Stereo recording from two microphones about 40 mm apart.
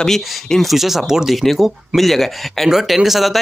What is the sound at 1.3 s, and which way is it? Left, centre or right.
Speech, centre.